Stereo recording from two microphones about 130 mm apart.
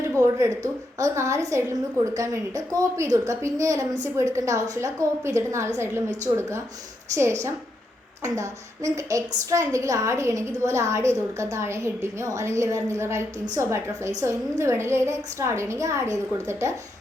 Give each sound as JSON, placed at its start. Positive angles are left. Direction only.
{"t": 0.2, "sound": "a woman's voice", "side_deg": -25}
{"t": 7.1, "sound": "a woman's voice", "side_deg": -20}